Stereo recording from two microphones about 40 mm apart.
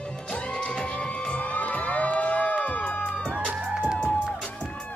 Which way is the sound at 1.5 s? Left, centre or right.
Left.